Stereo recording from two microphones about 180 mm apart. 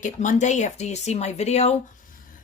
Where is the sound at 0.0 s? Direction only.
40° left (ahead or behind).